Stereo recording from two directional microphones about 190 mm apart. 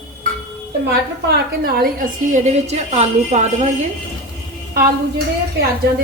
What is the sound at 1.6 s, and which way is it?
A woman's voice, 45° right (ahead or behind).